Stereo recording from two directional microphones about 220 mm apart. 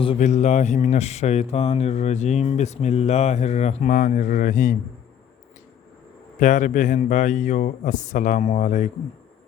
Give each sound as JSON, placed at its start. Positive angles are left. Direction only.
{"t": 0.0, "sound": "speech", "side_deg": 30}
{"t": 6.4, "sound": "speech", "side_deg": 35}